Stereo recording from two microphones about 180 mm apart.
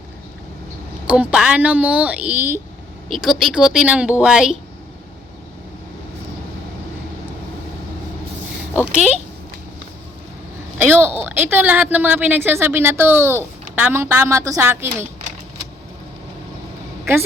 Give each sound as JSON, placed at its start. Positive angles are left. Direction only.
{"t": 1.0, "sound": "a woman's voice", "side_deg": -5}
{"t": 9.0, "sound": "speech", "side_deg": 40}
{"t": 10.8, "sound": "a woman's voice", "side_deg": -10}